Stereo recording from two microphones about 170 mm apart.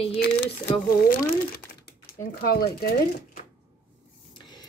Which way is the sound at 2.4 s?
65° left (ahead or behind).